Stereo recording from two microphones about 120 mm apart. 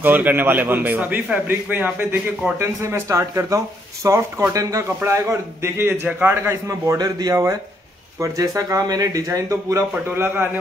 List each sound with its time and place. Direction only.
0.0 s a man's voice: 15° right (ahead or behind)